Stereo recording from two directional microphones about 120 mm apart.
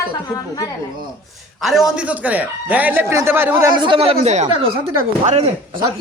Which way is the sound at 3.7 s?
40° right (ahead or behind).